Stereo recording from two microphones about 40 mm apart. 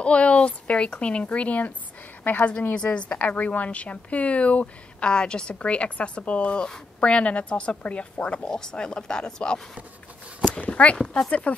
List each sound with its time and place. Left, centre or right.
0.0 s a woman's voice: left
2.3 s a woman's voice: left
2.7 s a woman's voice: left
5.1 s a woman's voice: left
10.6 s speech: left